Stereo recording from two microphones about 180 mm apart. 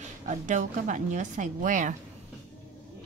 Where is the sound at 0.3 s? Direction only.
45° right (ahead or behind).